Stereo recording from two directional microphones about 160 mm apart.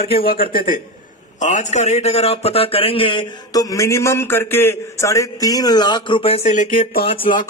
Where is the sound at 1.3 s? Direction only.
50° left (ahead or behind).